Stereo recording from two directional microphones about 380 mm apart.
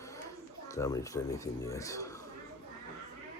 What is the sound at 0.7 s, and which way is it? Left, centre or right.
Speech, centre.